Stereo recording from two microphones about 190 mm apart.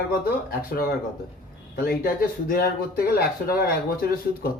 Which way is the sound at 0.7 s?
50° left (ahead or behind).